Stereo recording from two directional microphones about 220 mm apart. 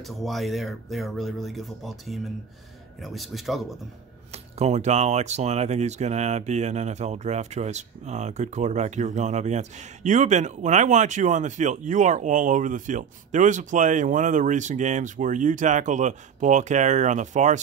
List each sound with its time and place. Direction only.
0.0 s speech: centre (ahead or behind)
4.3 s speech: 30° right (ahead or behind)